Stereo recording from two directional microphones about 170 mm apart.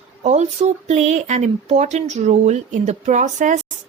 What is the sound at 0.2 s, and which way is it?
Speech, 40° right (ahead or behind).